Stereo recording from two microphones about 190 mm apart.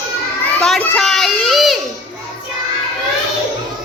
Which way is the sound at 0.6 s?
5° left (ahead or behind).